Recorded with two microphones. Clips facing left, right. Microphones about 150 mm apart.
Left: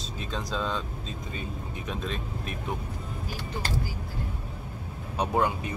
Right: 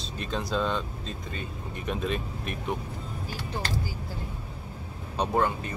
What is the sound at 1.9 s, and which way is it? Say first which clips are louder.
Speech: right 4 dB; 5° right (ahead or behind).